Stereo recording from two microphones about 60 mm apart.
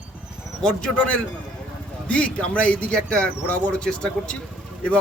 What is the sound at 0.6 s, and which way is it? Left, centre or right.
A man's voice, centre.